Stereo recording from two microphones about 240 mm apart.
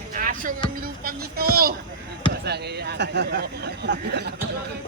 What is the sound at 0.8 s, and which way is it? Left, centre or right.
Speech, right.